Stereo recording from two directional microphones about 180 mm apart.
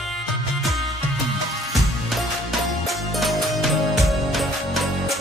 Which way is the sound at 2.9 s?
Centre (ahead or behind).